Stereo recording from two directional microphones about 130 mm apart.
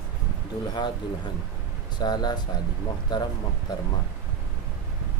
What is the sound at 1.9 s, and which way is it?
Speech, 35° left (ahead or behind).